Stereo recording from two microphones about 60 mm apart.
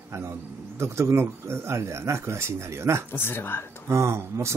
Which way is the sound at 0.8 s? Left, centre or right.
Right.